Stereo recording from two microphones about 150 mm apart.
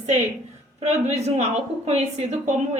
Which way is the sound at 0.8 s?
45° right (ahead or behind).